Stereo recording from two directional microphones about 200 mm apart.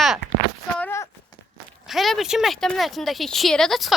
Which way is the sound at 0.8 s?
10° left (ahead or behind).